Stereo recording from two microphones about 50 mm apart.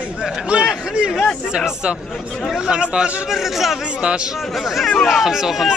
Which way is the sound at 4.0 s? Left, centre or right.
Centre.